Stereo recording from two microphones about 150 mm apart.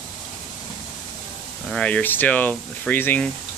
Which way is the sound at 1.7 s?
5° left (ahead or behind).